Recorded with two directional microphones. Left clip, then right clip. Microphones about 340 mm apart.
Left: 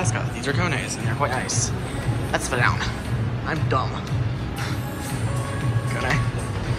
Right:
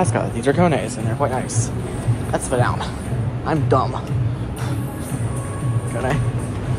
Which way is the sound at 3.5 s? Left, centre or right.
Centre.